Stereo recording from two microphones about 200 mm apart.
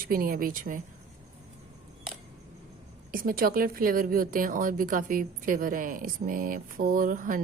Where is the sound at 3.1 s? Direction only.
45° right (ahead or behind).